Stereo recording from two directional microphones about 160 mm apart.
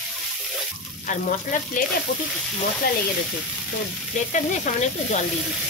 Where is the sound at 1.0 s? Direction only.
55° left (ahead or behind).